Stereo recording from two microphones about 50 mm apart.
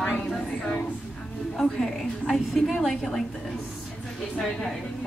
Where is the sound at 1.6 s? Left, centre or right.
Centre.